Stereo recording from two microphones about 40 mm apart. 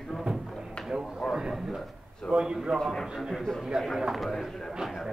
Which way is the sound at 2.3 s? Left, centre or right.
Centre.